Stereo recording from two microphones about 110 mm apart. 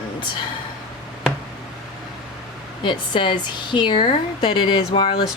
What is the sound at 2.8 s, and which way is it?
Speech, 45° left (ahead or behind).